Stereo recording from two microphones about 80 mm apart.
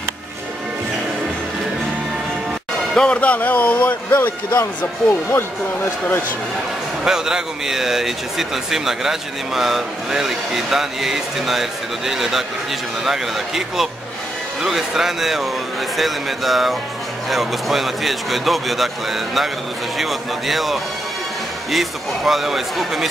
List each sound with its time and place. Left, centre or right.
2.9 s a man's voice: centre
7.1 s a man's voice: centre